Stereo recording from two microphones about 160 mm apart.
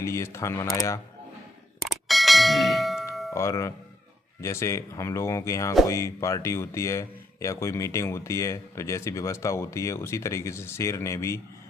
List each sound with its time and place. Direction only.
0.0 s speech: 15° left (ahead or behind)
1.8 s ding: centre (ahead or behind)
3.3 s a man's voice: 20° left (ahead or behind)